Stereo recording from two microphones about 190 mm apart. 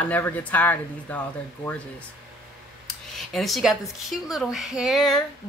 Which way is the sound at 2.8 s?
Centre (ahead or behind).